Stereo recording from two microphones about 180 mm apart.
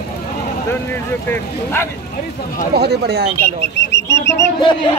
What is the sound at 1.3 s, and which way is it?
Speech, 15° left (ahead or behind).